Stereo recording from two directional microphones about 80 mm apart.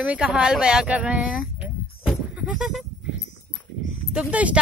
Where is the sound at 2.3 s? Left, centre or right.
Centre.